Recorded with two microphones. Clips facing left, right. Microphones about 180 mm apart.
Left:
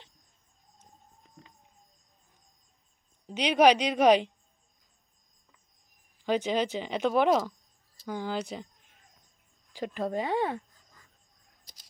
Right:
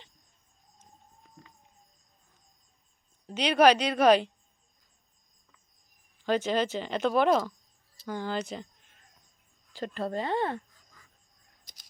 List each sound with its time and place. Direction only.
3.3 s speech: 15° left (ahead or behind)
6.2 s speech: 15° left (ahead or behind)